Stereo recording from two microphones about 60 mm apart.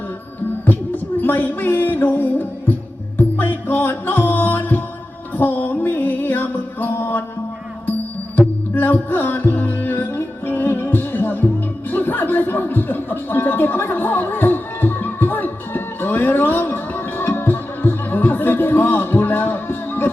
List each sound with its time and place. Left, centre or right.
0.6 s music: left
8.4 s music: left